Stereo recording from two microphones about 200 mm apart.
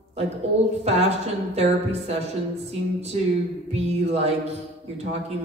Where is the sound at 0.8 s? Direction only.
30° right (ahead or behind).